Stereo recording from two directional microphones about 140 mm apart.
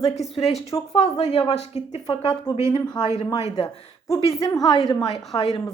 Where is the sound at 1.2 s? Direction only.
50° left (ahead or behind).